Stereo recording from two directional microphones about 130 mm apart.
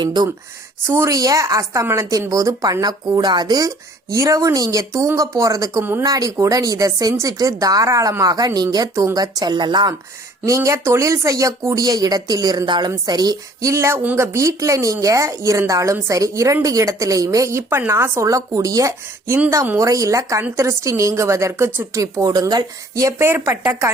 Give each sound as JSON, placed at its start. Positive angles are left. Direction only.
{"t": 0.0, "sound": "speech", "side_deg": -35}
{"t": 0.9, "sound": "speech", "side_deg": -20}
{"t": 5.8, "sound": "speech", "side_deg": -15}
{"t": 6.1, "sound": "speech", "side_deg": -25}
{"t": 10.4, "sound": "speech", "side_deg": -25}